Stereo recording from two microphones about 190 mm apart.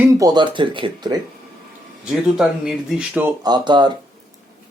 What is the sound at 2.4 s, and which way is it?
Speech, 5° right (ahead or behind).